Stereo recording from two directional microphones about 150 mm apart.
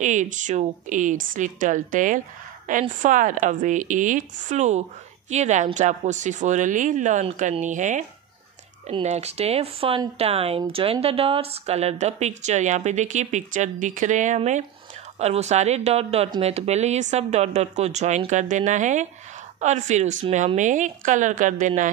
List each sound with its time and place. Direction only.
0.0 s speech: 55° right (ahead or behind)
9.0 s speech: 45° right (ahead or behind)